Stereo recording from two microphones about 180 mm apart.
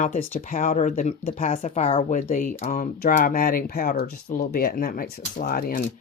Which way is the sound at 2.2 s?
50° left (ahead or behind).